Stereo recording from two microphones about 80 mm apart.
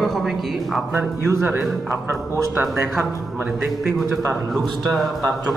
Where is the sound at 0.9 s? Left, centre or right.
Right.